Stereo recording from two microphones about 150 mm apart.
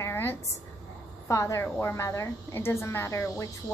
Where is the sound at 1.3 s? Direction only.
20° left (ahead or behind).